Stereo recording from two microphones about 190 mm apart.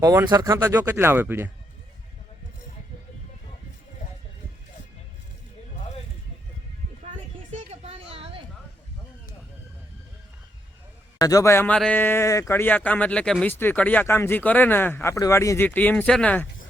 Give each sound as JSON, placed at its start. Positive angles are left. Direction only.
{"t": 0.0, "sound": "speech", "side_deg": -15}
{"t": 7.1, "sound": "a sound", "side_deg": -35}
{"t": 11.2, "sound": "speech", "side_deg": 20}